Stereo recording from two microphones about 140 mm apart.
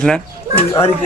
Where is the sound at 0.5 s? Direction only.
15° left (ahead or behind).